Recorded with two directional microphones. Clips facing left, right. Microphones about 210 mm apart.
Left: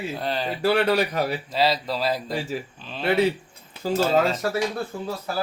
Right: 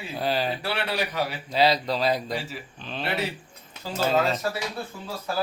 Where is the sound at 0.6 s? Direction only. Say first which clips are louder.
Left 8 dB; 45° left (ahead or behind).